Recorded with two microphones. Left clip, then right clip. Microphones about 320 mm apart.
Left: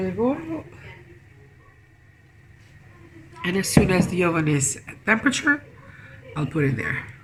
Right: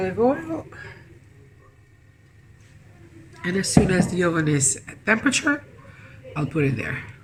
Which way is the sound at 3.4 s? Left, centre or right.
Centre.